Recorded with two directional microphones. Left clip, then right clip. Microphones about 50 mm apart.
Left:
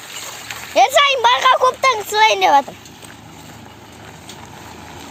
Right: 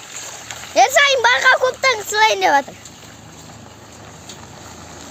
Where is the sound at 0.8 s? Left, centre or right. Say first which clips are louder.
Even; centre.